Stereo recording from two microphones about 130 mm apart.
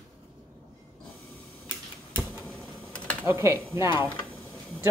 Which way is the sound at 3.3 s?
20° right (ahead or behind).